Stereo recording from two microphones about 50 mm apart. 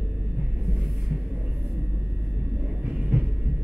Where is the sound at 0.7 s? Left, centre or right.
Centre.